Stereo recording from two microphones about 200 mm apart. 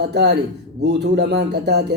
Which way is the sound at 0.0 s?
55° right (ahead or behind).